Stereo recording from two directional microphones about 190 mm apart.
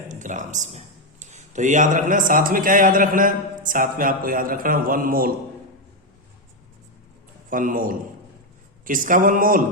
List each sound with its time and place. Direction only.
0.1 s speech: 40° right (ahead or behind)
7.5 s speech: 45° right (ahead or behind)